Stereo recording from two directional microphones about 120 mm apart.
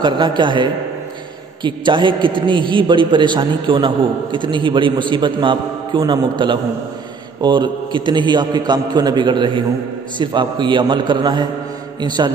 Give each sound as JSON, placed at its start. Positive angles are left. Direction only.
{"t": 0.0, "sound": "a man's voice", "side_deg": -40}